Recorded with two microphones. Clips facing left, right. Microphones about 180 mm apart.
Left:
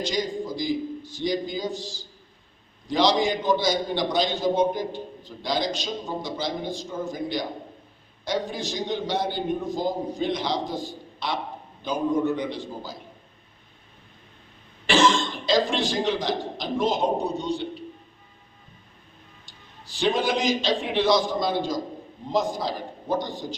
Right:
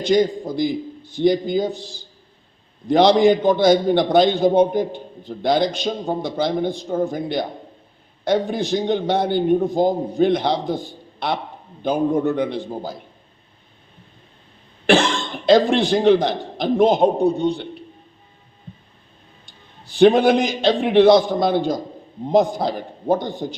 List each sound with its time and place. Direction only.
0.0 s a man's voice: 55° right (ahead or behind)
14.8 s a man's voice: 60° right (ahead or behind)
19.5 s a man's voice: 55° right (ahead or behind)